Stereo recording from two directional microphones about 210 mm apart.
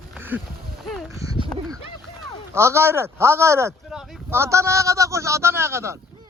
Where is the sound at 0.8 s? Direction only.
Centre (ahead or behind).